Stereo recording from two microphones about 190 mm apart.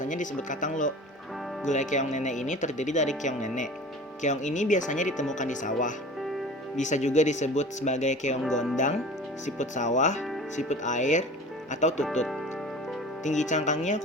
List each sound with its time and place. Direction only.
0.0 s speech: 40° left (ahead or behind)
8.4 s speech: centre (ahead or behind)
8.7 s speech: 40° left (ahead or behind)
13.2 s speech: 40° left (ahead or behind)